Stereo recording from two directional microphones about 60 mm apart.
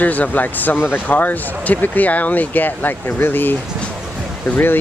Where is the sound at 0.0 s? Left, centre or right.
Left.